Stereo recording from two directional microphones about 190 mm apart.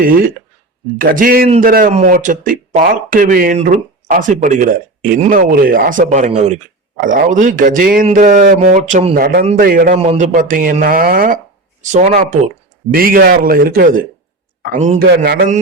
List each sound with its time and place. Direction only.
0.0 s speech: 50° right (ahead or behind)
10.0 s speech: 35° right (ahead or behind)
15.1 s mantra: 55° right (ahead or behind)